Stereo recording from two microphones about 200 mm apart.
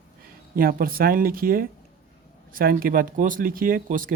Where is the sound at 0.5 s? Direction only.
45° right (ahead or behind).